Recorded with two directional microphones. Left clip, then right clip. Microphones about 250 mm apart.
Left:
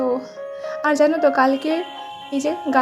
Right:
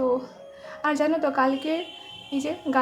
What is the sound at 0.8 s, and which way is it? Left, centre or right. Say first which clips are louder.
A woman's voice: left 7 dB; centre.